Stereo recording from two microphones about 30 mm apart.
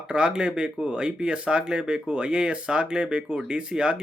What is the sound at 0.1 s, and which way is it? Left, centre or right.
Speech, right.